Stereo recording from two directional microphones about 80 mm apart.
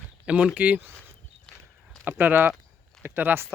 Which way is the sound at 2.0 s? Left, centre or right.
Right.